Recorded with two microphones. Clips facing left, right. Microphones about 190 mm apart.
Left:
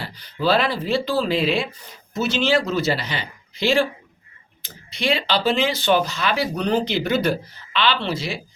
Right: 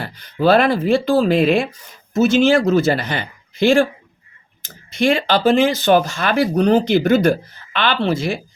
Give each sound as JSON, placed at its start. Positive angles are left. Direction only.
{"t": 0.0, "sound": "speech", "side_deg": -50}